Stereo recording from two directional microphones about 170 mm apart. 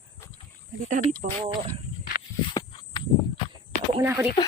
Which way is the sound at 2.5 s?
25° left (ahead or behind).